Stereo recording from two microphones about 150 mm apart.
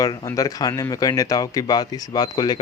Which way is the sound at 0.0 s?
25° left (ahead or behind).